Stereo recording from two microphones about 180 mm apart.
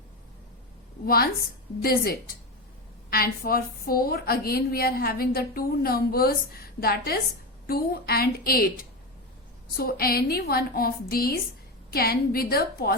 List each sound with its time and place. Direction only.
1.0 s a woman's voice: 55° left (ahead or behind)